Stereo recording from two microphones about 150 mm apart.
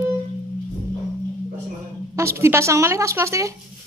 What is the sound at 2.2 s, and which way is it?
A woman's voice, 20° right (ahead or behind).